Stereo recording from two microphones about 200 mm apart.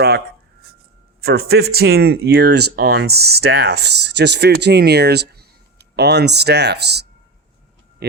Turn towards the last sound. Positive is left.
turn(degrees=-55)  # may be behind; listen again after turning